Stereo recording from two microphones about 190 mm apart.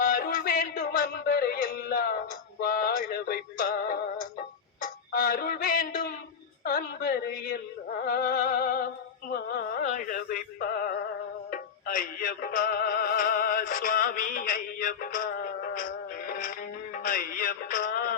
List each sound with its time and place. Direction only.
0.0 s music: 50° left (ahead or behind)
2.6 s synthetic singing: 50° left (ahead or behind)
4.8 s music: 50° left (ahead or behind)
6.7 s a sound: 50° left (ahead or behind)
8.0 s music: 50° left (ahead or behind)